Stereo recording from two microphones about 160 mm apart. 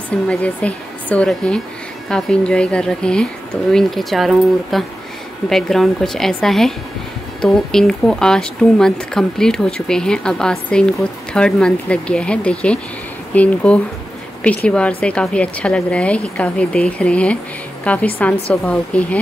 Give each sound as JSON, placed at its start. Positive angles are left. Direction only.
{"t": 0.3, "sound": "a woman's voice", "side_deg": 10}